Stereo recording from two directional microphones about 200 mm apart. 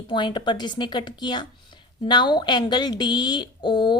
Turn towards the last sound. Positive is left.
turn(degrees=20)  # may be behind; listen again after turning